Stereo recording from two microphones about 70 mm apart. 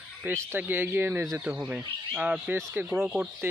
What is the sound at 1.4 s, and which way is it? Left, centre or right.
Speech, centre.